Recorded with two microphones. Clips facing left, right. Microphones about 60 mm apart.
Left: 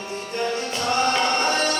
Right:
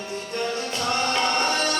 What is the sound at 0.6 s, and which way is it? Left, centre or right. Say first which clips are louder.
Music: left 3 dB; left.